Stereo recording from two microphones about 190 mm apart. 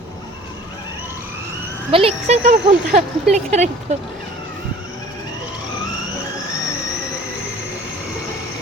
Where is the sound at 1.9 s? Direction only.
35° right (ahead or behind).